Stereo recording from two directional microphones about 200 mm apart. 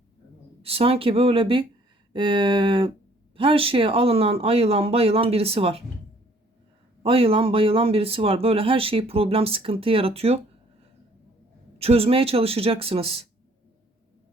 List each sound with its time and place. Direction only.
0.6 s speech: 30° right (ahead or behind)
7.0 s speech: 30° right (ahead or behind)
11.8 s speech: 30° right (ahead or behind)